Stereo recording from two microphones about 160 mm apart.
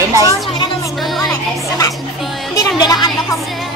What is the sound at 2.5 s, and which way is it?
Music, 25° left (ahead or behind).